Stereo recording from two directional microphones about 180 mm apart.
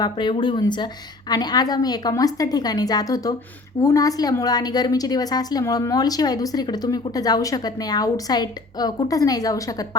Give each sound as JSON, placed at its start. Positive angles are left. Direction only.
{"t": 0.0, "sound": "a woman's voice", "side_deg": 25}